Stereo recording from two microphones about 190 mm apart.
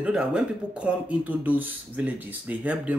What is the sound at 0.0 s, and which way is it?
Speech, 5° right (ahead or behind).